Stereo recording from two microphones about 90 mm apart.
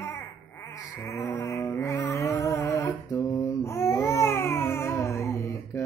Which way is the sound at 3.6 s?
30° left (ahead or behind).